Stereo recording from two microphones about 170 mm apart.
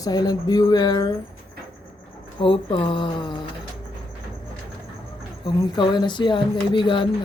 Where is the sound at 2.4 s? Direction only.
30° left (ahead or behind).